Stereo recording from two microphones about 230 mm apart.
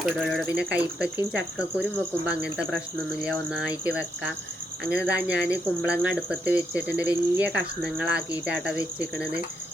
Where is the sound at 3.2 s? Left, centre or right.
Centre.